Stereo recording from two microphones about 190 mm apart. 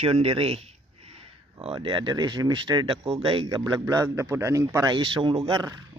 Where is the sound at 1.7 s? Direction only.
20° right (ahead or behind).